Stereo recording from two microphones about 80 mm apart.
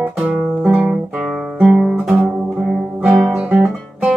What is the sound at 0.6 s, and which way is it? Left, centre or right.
Guitar, centre.